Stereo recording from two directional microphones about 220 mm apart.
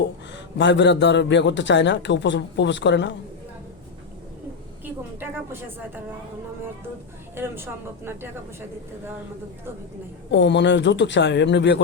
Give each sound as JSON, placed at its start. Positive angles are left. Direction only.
{"t": 0.6, "sound": "a man's voice", "side_deg": 55}
{"t": 5.5, "sound": "speech", "side_deg": -10}
{"t": 7.3, "sound": "speech", "side_deg": -10}
{"t": 10.3, "sound": "a man's voice", "side_deg": 55}